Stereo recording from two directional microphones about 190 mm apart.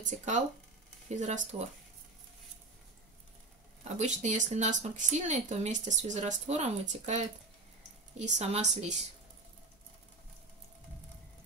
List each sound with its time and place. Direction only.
0.0 s speech: 40° right (ahead or behind)
4.0 s speech: 40° right (ahead or behind)